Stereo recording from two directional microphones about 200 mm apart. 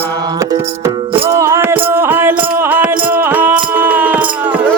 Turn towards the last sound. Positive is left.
turn(degrees=-10)  # may be behind; listen again after turning